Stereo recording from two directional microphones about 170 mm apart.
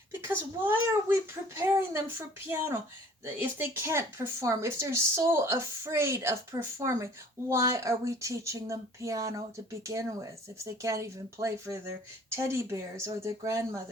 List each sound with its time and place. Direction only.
0.6 s a woman's voice: 10° right (ahead or behind)